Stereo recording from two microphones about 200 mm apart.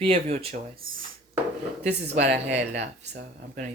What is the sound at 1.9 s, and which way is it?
Speech, 55° right (ahead or behind).